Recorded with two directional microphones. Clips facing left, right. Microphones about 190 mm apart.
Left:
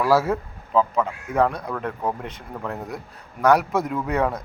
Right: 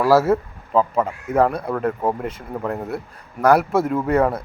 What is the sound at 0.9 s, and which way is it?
Speech, 5° right (ahead or behind).